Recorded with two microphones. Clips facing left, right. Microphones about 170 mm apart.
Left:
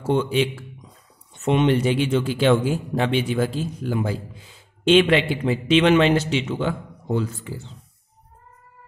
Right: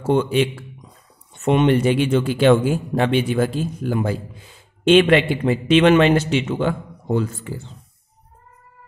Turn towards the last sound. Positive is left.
turn(degrees=-50)  # may be behind; listen again after turning